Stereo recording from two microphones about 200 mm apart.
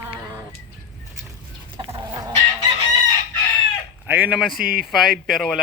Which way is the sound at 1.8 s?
20° right (ahead or behind).